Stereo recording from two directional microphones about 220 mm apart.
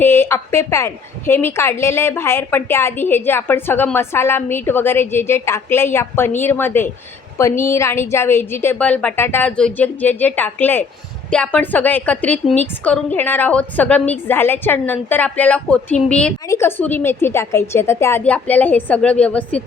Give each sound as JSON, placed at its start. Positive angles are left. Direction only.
{"t": 0.0, "sound": "a woman's voice", "side_deg": 10}